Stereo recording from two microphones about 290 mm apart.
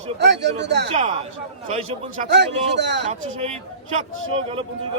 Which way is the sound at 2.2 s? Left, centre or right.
Right.